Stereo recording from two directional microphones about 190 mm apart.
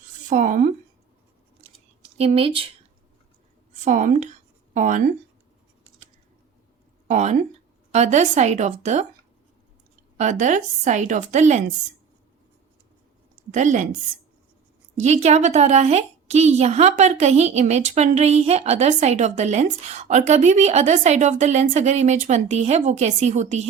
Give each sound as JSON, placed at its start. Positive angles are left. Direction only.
{"t": 0.3, "sound": "a woman's voice", "side_deg": -40}
{"t": 2.1, "sound": "speech", "side_deg": -30}
{"t": 3.8, "sound": "speech", "side_deg": -40}
{"t": 7.1, "sound": "a woman's voice", "side_deg": -40}
{"t": 10.2, "sound": "a woman's voice", "side_deg": -40}
{"t": 13.5, "sound": "a woman's voice", "side_deg": -40}
{"t": 14.9, "sound": "a woman's voice", "side_deg": -35}